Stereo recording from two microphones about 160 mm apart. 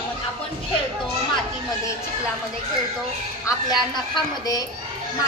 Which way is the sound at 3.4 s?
25° left (ahead or behind).